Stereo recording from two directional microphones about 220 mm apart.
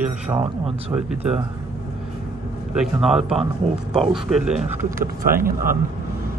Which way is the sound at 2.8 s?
Centre (ahead or behind).